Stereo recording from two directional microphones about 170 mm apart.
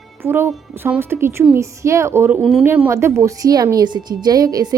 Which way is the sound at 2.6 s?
10° right (ahead or behind).